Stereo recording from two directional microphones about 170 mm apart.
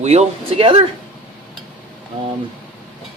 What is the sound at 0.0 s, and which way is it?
Speech, 40° right (ahead or behind).